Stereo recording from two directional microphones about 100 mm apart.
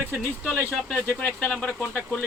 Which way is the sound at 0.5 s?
20° right (ahead or behind).